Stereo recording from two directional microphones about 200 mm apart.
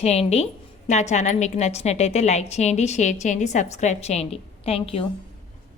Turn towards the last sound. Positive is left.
turn(degrees=30)  # may be behind; listen again after turning